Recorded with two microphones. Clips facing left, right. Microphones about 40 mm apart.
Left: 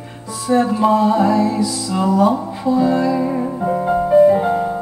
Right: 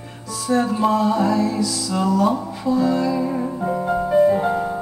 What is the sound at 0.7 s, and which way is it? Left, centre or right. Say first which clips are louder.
Music: left 4 dB; centre.